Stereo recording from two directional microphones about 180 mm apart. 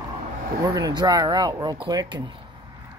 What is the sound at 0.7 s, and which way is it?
Speech, 20° right (ahead or behind).